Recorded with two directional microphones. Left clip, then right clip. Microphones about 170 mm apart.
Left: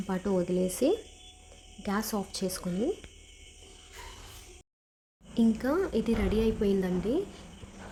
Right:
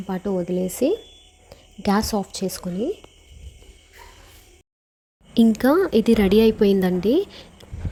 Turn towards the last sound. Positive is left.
turn(degrees=-45)  # may be behind; listen again after turning